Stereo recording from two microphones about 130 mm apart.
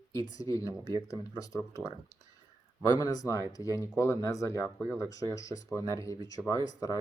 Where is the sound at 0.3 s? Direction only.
25° left (ahead or behind).